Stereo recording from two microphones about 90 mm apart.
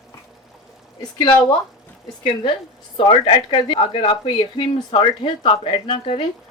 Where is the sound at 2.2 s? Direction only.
65° left (ahead or behind).